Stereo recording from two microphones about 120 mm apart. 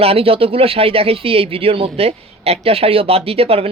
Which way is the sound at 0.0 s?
55° right (ahead or behind).